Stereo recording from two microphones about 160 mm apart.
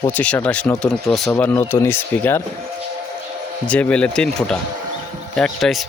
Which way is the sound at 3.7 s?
10° left (ahead or behind).